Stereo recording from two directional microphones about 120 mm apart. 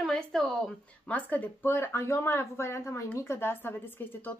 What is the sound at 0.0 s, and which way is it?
Speech, 5° left (ahead or behind).